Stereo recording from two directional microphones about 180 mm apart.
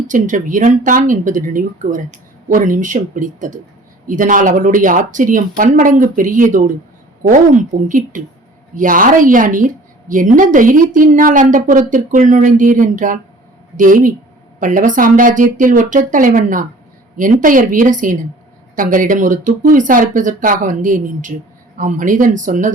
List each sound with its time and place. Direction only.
0.1 s a woman's voice: 45° right (ahead or behind)